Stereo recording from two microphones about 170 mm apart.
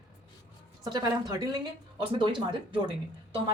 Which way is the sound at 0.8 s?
25° right (ahead or behind).